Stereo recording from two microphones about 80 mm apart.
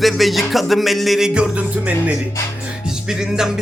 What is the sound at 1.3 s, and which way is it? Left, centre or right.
Speech, centre.